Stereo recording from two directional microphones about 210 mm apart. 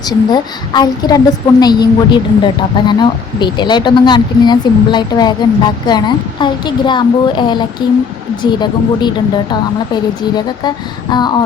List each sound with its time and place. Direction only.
0.0 s speech: 20° left (ahead or behind)